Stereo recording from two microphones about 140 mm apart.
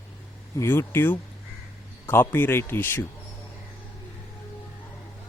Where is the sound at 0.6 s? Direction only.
15° left (ahead or behind).